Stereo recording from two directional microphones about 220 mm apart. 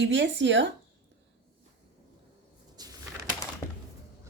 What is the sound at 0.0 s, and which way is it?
Speech, 55° right (ahead or behind).